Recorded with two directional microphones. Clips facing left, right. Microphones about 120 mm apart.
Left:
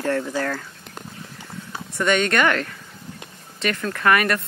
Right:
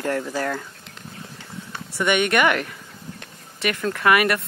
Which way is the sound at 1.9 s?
15° right (ahead or behind).